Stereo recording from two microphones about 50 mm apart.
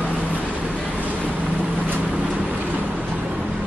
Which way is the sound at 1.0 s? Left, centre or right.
Right.